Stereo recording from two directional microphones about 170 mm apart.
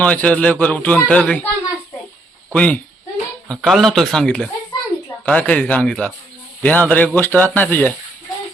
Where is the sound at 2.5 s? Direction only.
5° left (ahead or behind).